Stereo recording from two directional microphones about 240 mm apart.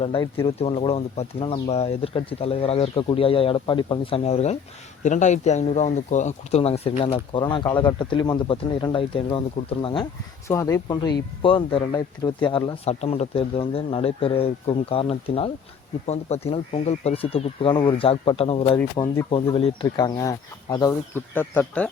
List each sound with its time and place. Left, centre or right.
0.0 s speech: left
18.8 s speech: centre
19.3 s speech: left; by 21.8 s centre